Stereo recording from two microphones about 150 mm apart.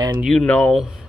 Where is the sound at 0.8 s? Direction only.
5° right (ahead or behind).